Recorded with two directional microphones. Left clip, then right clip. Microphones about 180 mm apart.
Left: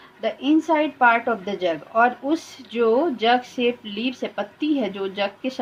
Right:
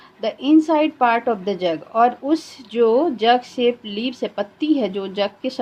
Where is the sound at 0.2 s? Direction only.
45° right (ahead or behind).